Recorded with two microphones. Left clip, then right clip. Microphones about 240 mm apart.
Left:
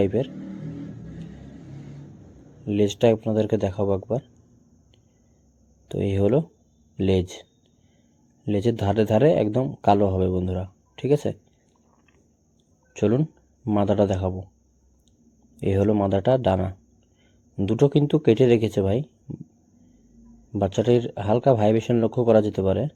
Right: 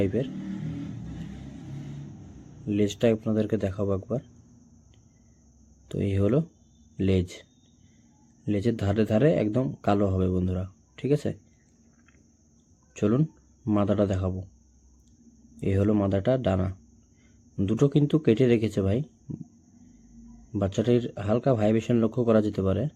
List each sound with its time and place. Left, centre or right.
0.0 s a man's voice: centre
2.6 s a man's voice: centre
5.9 s a man's voice: centre
8.4 s a man's voice: centre
12.9 s a man's voice: centre
15.6 s a man's voice: centre
20.5 s a man's voice: centre